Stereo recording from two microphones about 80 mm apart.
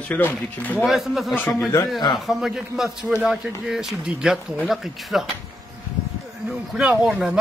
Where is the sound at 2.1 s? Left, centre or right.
Centre.